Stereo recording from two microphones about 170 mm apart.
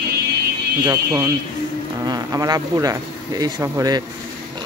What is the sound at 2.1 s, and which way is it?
Speech, 20° right (ahead or behind).